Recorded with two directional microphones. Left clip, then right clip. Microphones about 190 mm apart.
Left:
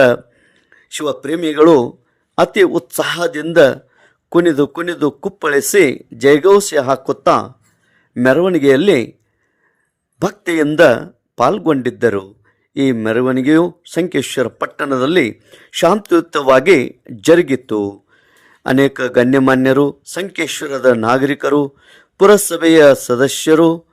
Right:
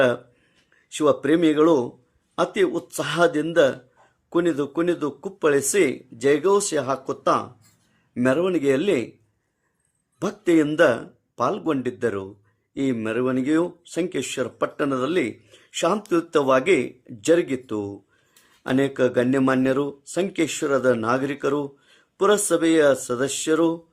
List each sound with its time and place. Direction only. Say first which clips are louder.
0.7 s a sound: left 4 dB; 40° left (ahead or behind)
1.0 s speech: right 1 dB; centre (ahead or behind)
1.3 s speech: left 11 dB; 45° left (ahead or behind)
10.2 s speech: left 4 dB; 40° left (ahead or behind)